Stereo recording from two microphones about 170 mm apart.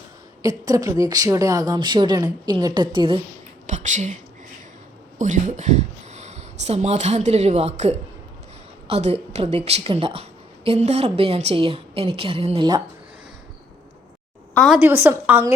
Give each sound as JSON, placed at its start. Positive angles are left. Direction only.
{"t": 0.4, "sound": "speech", "side_deg": -20}
{"t": 3.7, "sound": "a sound", "side_deg": -45}
{"t": 5.1, "sound": "a woman's voice", "side_deg": -45}
{"t": 14.5, "sound": "a woman's voice", "side_deg": 0}
{"t": 14.8, "sound": "a woman's voice", "side_deg": -10}